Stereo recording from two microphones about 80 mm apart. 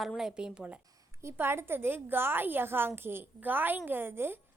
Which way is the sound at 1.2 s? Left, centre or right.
Right.